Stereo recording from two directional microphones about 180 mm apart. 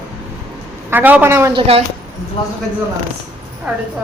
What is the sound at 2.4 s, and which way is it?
Speech, 30° left (ahead or behind).